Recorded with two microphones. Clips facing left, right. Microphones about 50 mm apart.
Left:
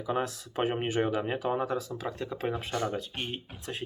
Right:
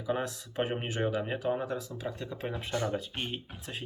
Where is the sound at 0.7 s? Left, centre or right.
Centre.